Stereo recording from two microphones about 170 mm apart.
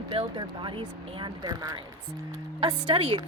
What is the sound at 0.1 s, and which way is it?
A woman's voice, 30° right (ahead or behind).